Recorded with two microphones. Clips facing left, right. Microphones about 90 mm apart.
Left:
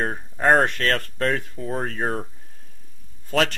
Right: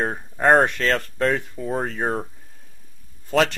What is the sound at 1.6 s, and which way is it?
Speech, 10° right (ahead or behind).